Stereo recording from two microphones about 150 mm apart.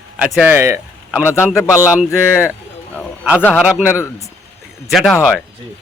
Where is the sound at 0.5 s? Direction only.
15° right (ahead or behind).